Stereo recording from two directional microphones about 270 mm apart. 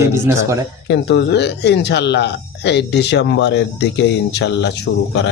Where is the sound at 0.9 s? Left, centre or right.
Left.